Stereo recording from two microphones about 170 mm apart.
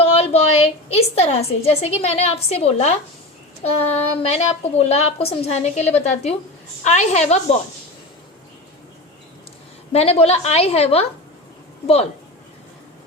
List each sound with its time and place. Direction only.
0.0 s a woman's voice: 35° left (ahead or behind)
9.9 s a woman's voice: 35° left (ahead or behind)